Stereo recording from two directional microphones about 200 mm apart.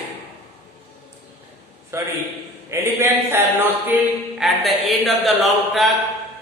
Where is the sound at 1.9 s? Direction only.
15° right (ahead or behind).